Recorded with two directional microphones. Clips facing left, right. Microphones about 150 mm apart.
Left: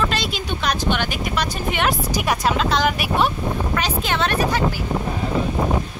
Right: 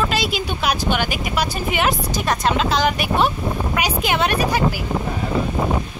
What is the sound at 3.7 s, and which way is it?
Speech, 10° right (ahead or behind).